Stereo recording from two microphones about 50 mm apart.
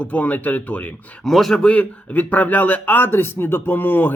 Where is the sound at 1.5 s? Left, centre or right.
Centre.